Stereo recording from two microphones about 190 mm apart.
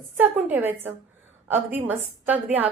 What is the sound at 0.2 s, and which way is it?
A woman's voice, 10° right (ahead or behind).